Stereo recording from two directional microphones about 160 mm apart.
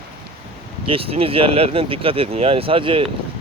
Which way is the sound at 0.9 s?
35° right (ahead or behind).